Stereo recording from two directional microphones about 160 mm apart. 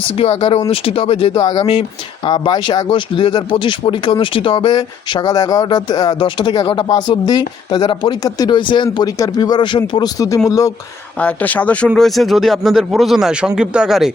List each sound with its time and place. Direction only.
0.2 s speech: 35° left (ahead or behind)
11.2 s speech: 10° left (ahead or behind)